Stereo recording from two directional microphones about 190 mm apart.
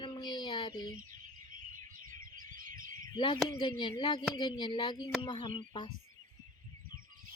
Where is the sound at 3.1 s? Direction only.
25° left (ahead or behind).